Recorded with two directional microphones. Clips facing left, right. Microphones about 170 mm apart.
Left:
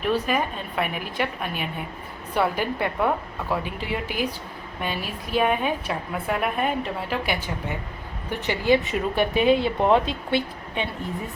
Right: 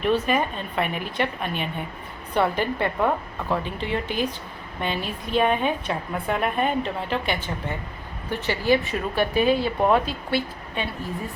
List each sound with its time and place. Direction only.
0.0 s a woman's voice: 5° left (ahead or behind); by 11.1 s 20° left (ahead or behind)